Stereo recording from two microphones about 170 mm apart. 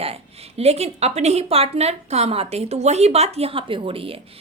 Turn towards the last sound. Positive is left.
turn(degrees=-30)  # may be behind; listen again after turning